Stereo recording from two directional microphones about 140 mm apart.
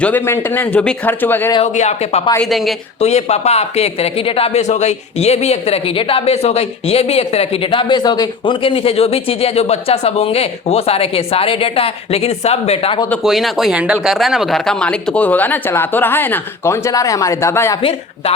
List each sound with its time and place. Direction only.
0.0 s speech: 15° left (ahead or behind)
1.6 s speech: 55° left (ahead or behind)
2.4 s speech: centre (ahead or behind)
3.0 s speech: 50° left (ahead or behind)
13.2 s speech: centre (ahead or behind); by 17.7 s 20° left (ahead or behind)